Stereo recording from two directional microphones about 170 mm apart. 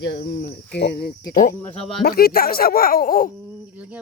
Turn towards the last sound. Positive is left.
turn(degrees=-10)  # may be behind; listen again after turning